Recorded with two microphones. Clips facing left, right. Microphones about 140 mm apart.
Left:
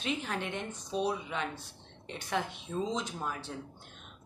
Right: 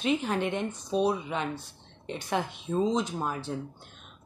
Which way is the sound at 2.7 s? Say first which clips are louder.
Right 7 dB; 40° right (ahead or behind).